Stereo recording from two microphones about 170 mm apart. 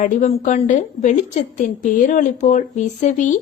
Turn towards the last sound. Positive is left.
turn(degrees=45)  # may be behind; listen again after turning